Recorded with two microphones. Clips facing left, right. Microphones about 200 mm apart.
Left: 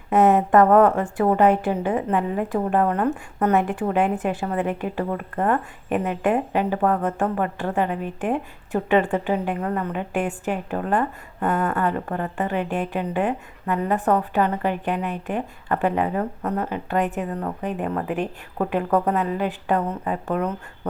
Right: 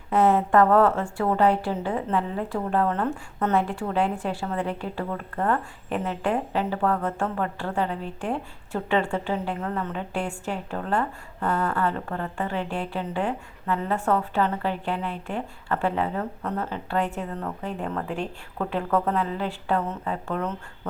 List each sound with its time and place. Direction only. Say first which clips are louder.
0.3 s a woman's voice: left 3 dB; 20° left (ahead or behind)